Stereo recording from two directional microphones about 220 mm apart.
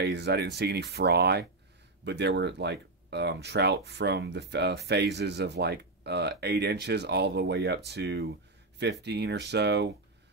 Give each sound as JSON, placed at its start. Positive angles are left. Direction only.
{"t": 0.0, "sound": "speech", "side_deg": -50}